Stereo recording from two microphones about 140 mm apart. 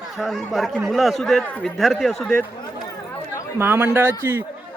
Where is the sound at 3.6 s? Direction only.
15° right (ahead or behind).